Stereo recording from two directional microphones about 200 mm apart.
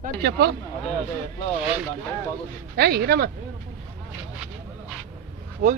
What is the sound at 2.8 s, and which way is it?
Speech, 50° right (ahead or behind).